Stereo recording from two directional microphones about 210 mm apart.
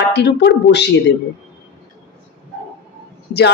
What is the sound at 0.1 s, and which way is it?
Speech, 55° left (ahead or behind).